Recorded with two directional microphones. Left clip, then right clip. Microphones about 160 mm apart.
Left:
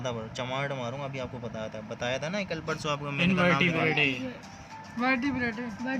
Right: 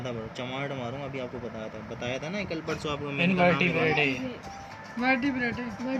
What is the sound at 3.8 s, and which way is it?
Speech, 5° left (ahead or behind).